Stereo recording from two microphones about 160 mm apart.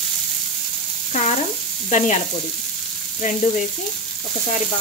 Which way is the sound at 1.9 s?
50° left (ahead or behind).